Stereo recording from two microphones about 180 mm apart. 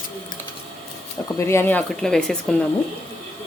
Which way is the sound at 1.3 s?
15° left (ahead or behind).